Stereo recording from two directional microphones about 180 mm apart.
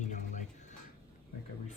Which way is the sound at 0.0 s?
45° left (ahead or behind).